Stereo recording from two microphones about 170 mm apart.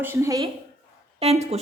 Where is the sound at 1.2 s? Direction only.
40° right (ahead or behind).